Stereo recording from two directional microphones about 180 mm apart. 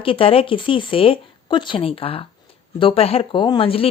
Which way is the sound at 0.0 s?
30° left (ahead or behind).